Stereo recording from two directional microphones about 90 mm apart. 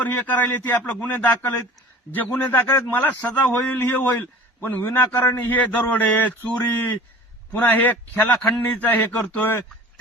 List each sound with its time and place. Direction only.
0.0 s a man's voice: 20° left (ahead or behind)